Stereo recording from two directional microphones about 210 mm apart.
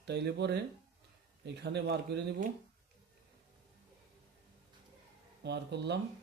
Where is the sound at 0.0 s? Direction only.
55° right (ahead or behind).